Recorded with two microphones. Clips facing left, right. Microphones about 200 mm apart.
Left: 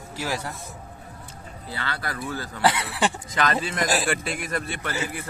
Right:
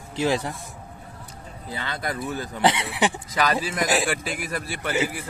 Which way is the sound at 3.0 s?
5° right (ahead or behind).